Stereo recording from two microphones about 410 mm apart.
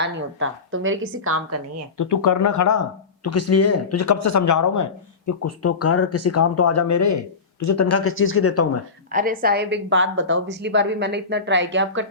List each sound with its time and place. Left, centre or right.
0.0 s a woman's voice: right
2.0 s speech: left
9.1 s a woman's voice: centre